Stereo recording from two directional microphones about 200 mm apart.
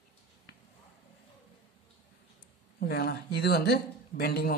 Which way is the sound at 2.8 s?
55° left (ahead or behind).